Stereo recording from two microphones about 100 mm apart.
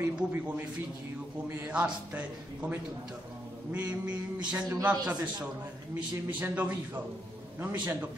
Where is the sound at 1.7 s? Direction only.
15° right (ahead or behind).